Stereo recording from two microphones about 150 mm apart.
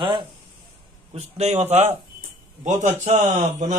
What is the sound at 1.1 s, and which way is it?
A man's voice, 45° right (ahead or behind).